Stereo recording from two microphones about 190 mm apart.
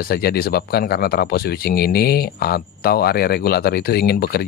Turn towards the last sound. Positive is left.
turn(degrees=55)  # may be behind; listen again after turning